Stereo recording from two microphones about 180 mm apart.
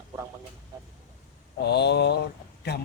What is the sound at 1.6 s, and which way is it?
Mantra, 65° left (ahead or behind).